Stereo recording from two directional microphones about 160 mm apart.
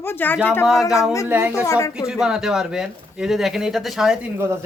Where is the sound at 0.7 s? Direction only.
Centre (ahead or behind).